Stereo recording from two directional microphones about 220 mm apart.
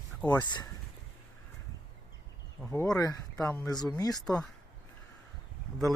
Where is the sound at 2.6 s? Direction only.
10° left (ahead or behind).